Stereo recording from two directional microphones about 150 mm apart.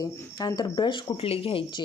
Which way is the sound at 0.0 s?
25° left (ahead or behind).